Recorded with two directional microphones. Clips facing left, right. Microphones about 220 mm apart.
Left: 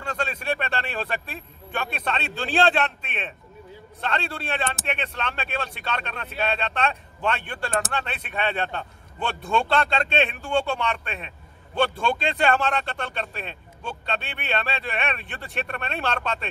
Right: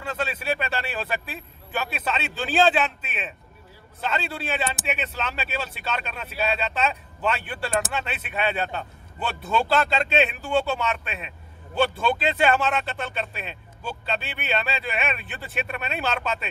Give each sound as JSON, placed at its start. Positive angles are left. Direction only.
{"t": 0.0, "sound": "speech", "side_deg": 0}